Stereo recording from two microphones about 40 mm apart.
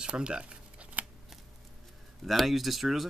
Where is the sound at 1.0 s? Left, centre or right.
Right.